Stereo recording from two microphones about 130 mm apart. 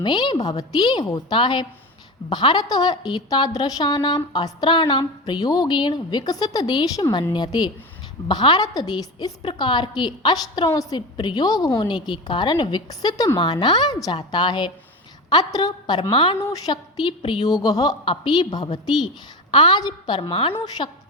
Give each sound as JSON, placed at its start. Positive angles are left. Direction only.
{"t": 0.0, "sound": "a woman's voice", "side_deg": 35}
{"t": 18.1, "sound": "a woman's voice", "side_deg": 45}
{"t": 18.5, "sound": "a woman's voice", "side_deg": 30}